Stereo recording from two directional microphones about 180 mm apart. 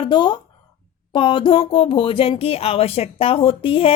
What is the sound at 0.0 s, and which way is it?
Speech, 25° left (ahead or behind).